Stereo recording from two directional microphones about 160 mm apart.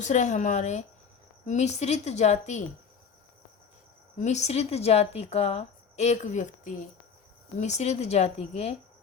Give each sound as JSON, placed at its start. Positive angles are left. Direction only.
{"t": 0.0, "sound": "a woman's voice", "side_deg": 50}
{"t": 4.2, "sound": "a woman's voice", "side_deg": 45}